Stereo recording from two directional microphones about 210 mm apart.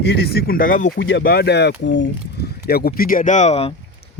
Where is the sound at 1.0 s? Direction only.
55° left (ahead or behind).